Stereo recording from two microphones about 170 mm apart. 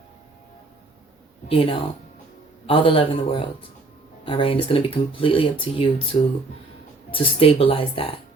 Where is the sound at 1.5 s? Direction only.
35° left (ahead or behind).